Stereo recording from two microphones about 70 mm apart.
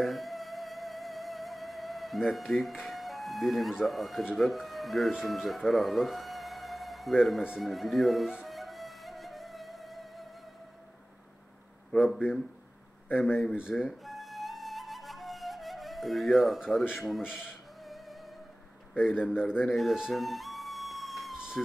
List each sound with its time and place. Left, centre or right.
0.0 s music: centre
5.2 s speech: centre
7.5 s music: centre
11.9 s speech: centre
13.6 s speech: centre
13.8 s flute: centre
17.2 s music: centre
19.3 s speech: centre
19.7 s speech: centre
20.1 s music: centre